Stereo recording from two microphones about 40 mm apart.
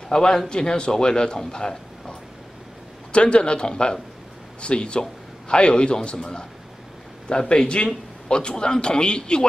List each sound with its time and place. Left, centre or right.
0.1 s a man's voice: centre
1.5 s a sound: centre
3.1 s a man's voice: left